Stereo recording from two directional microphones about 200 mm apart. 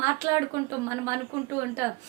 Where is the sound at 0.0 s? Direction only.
15° right (ahead or behind).